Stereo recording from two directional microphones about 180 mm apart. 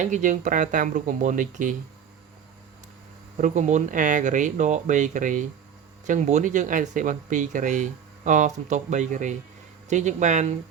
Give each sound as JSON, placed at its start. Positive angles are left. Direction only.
{"t": 0.0, "sound": "speech", "side_deg": -45}
{"t": 3.4, "sound": "speech", "side_deg": -45}